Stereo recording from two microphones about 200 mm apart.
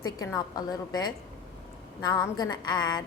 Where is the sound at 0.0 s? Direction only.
20° left (ahead or behind).